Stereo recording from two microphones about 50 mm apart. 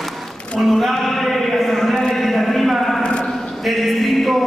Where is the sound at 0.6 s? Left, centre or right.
Centre.